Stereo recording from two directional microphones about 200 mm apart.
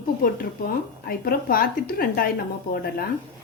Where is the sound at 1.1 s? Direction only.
45° left (ahead or behind).